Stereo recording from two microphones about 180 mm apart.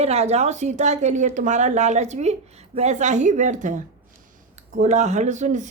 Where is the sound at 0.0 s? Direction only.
35° right (ahead or behind).